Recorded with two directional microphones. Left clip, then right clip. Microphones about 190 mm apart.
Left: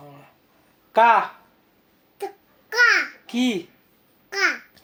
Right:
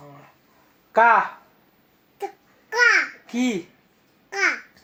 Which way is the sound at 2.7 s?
10° left (ahead or behind).